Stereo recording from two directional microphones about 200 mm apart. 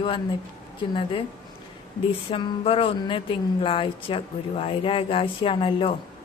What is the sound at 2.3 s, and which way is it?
Speech, 30° left (ahead or behind).